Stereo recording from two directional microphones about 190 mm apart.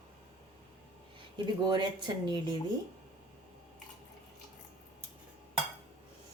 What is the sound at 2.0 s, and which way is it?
Speech, 25° right (ahead or behind).